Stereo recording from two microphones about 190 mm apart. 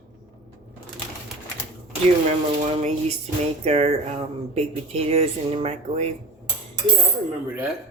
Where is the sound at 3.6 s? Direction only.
35° right (ahead or behind).